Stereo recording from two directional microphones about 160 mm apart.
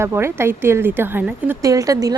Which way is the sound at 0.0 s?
15° right (ahead or behind).